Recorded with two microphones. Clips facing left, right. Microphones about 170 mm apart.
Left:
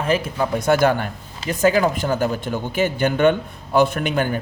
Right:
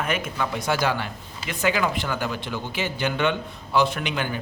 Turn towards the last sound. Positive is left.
turn(degrees=45)  # may be behind; listen again after turning